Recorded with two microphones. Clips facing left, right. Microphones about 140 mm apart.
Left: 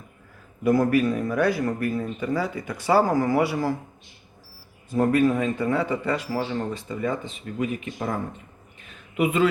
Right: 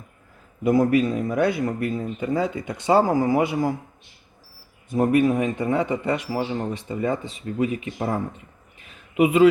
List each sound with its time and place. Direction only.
0.6 s speech: 20° right (ahead or behind)
4.9 s speech: 20° right (ahead or behind)